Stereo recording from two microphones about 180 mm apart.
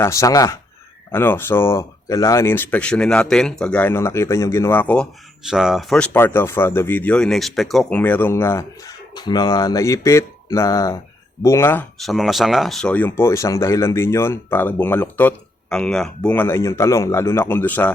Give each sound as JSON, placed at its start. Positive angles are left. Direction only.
{"t": 0.0, "sound": "speech", "side_deg": 15}
{"t": 5.4, "sound": "speech", "side_deg": -5}
{"t": 6.1, "sound": "speech", "side_deg": 15}